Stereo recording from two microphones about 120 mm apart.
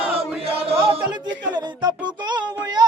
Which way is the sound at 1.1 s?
35° right (ahead or behind).